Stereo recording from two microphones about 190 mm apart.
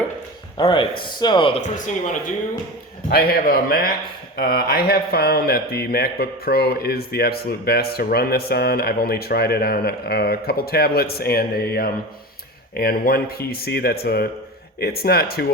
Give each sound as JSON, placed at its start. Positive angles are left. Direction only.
{"t": 0.5, "sound": "speech", "side_deg": 25}
{"t": 3.1, "sound": "speech", "side_deg": 55}